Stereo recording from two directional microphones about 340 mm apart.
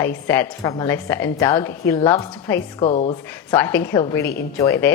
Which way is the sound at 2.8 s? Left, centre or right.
Left.